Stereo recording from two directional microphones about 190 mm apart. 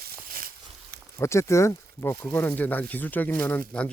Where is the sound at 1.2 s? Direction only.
15° left (ahead or behind).